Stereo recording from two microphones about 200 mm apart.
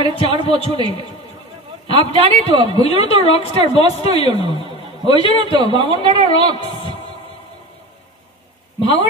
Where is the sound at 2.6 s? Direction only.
30° left (ahead or behind).